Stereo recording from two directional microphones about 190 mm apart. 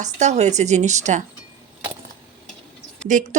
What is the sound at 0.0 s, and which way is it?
A woman's voice, 35° right (ahead or behind).